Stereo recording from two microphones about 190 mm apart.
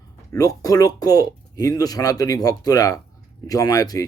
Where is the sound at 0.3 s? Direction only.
20° left (ahead or behind).